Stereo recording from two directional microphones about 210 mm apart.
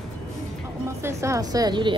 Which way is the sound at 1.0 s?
15° right (ahead or behind).